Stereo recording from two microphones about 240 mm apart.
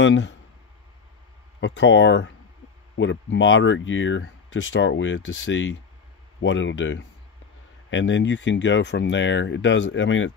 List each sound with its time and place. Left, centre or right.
0.0 s speech: left
1.6 s speech: left